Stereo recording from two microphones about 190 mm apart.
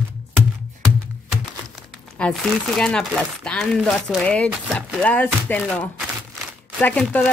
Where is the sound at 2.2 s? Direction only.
Centre (ahead or behind).